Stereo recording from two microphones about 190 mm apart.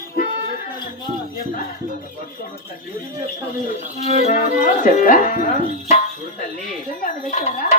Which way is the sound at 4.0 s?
35° left (ahead or behind).